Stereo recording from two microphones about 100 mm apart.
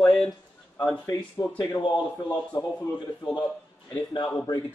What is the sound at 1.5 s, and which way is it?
A man's voice, 35° left (ahead or behind).